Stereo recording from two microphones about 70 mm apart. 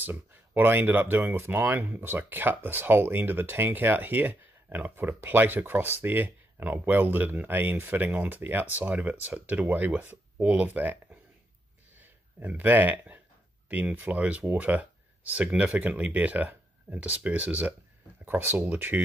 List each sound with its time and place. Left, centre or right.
0.0 s speech: right